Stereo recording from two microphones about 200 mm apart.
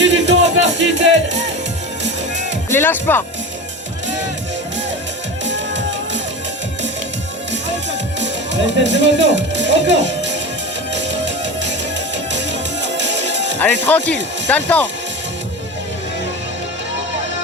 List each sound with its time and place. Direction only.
0.0 s music: 65° right (ahead or behind)
2.6 s speech: 10° left (ahead or behind)
5.5 s music: 65° right (ahead or behind)
7.5 s music: 65° right (ahead or behind)
13.8 s speech: 10° left (ahead or behind)